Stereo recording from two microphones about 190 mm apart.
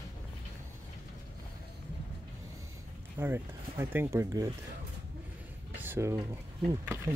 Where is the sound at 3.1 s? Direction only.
10° right (ahead or behind).